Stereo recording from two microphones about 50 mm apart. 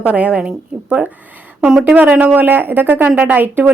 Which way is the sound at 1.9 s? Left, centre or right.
Right.